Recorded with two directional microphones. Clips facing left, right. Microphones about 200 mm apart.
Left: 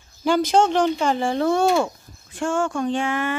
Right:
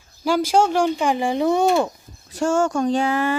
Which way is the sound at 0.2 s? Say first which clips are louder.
Even; 10° right (ahead or behind).